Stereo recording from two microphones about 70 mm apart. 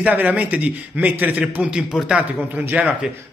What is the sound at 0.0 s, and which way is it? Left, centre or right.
A man's voice, right.